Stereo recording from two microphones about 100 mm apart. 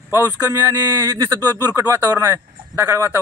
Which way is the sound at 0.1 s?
30° right (ahead or behind).